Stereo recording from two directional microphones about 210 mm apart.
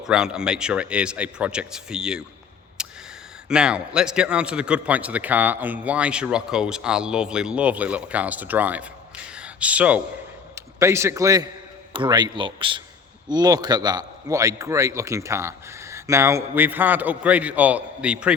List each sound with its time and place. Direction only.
0.0 s a man's voice: 5° right (ahead or behind)
2.8 s a sound: 5° right (ahead or behind)
3.5 s a man's voice: 5° right (ahead or behind)